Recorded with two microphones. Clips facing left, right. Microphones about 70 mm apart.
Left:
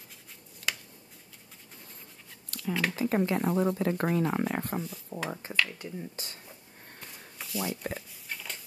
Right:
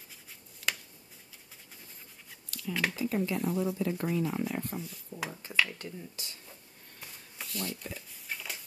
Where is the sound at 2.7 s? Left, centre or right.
Centre.